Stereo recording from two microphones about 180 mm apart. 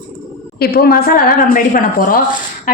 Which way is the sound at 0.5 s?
60° left (ahead or behind).